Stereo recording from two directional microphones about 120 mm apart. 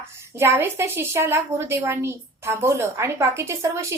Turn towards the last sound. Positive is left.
turn(degrees=-25)  # may be behind; listen again after turning